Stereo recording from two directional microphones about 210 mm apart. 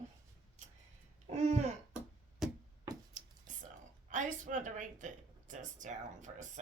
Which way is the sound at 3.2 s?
35° right (ahead or behind).